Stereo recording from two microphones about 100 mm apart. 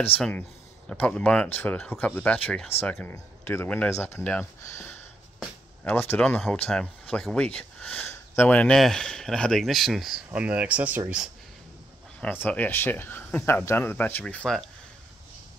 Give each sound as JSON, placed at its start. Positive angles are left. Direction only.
{"t": 0.3, "sound": "speech", "side_deg": 15}
{"t": 5.9, "sound": "speech", "side_deg": 20}
{"t": 6.7, "sound": "speech", "side_deg": 10}
{"t": 10.3, "sound": "speech", "side_deg": -15}
{"t": 12.2, "sound": "speech", "side_deg": 15}
{"t": 14.2, "sound": "speech", "side_deg": 10}